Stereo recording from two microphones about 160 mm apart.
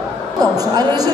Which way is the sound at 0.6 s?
25° right (ahead or behind).